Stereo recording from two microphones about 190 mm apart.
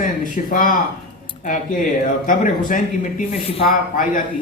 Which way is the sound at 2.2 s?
45° left (ahead or behind).